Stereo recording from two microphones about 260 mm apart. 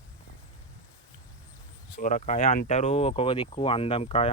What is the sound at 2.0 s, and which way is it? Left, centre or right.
Speech, left.